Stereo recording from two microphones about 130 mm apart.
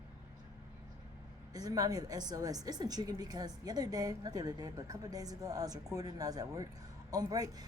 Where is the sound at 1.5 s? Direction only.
30° right (ahead or behind).